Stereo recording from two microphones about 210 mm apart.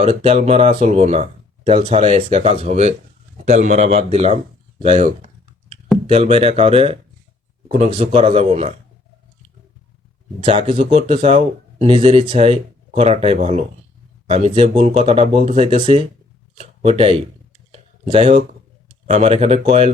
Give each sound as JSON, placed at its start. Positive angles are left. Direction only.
{"t": 0.0, "sound": "a man's voice", "side_deg": -30}
{"t": 6.1, "sound": "speech", "side_deg": -25}
{"t": 10.4, "sound": "speech", "side_deg": -25}
{"t": 17.7, "sound": "a sound", "side_deg": -30}
{"t": 19.0, "sound": "a man's voice", "side_deg": -30}